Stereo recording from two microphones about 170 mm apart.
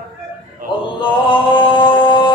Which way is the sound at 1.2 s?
30° left (ahead or behind).